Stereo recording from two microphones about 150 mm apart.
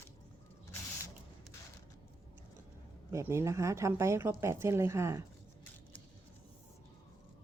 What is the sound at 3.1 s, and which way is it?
Speech, 20° right (ahead or behind).